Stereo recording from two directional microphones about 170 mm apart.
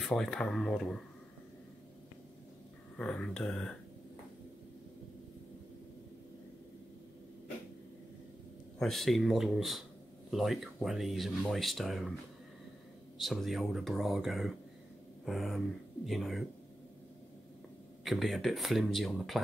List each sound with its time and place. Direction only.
0.0 s speech: 5° left (ahead or behind)
3.0 s speech: 5° left (ahead or behind)
8.7 s speech: centre (ahead or behind)
13.2 s speech: centre (ahead or behind)
18.0 s speech: centre (ahead or behind)